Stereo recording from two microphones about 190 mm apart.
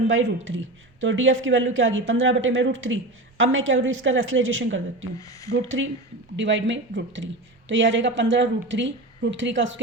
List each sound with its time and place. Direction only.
0.1 s speech: 90° right
6.3 s speech: 75° right (ahead or behind)